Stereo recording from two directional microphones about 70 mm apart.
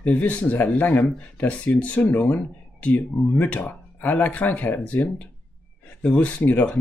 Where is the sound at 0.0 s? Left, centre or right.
Left.